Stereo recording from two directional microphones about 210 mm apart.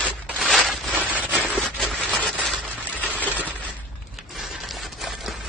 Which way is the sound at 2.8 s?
5° right (ahead or behind).